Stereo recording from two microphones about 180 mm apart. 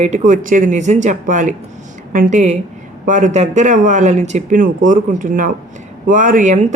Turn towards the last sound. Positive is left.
turn(degrees=-40)  # may be behind; listen again after turning